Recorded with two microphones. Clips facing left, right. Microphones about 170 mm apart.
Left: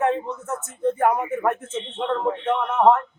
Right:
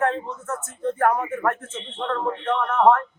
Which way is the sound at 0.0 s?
15° left (ahead or behind).